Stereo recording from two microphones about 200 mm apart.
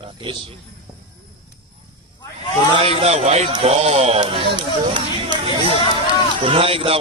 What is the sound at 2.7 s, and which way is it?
Speech, 25° right (ahead or behind).